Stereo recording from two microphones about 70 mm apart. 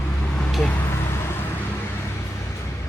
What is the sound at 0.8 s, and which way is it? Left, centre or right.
Vehicle, left.